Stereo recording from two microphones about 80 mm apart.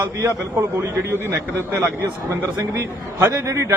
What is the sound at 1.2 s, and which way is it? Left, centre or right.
Speech, right.